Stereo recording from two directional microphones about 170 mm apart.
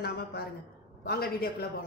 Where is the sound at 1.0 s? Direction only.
60° left (ahead or behind).